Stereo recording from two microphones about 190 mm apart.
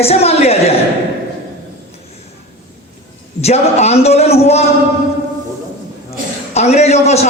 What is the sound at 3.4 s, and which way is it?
A man's voice, 35° left (ahead or behind).